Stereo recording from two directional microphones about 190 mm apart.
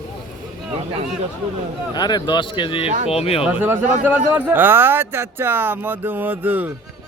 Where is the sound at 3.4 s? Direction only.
10° right (ahead or behind).